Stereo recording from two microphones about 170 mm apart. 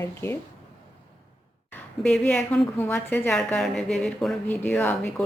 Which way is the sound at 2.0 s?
5° left (ahead or behind).